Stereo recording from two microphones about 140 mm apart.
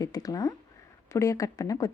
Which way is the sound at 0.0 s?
25° left (ahead or behind).